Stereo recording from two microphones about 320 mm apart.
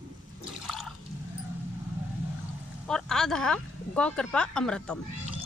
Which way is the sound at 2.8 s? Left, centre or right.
Centre.